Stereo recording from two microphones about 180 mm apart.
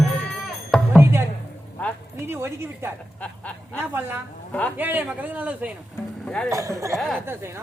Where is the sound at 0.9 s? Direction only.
15° right (ahead or behind).